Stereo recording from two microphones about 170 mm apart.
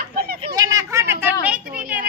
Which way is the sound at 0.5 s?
20° right (ahead or behind).